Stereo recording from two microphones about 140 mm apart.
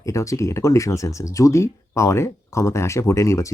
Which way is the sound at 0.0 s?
20° left (ahead or behind).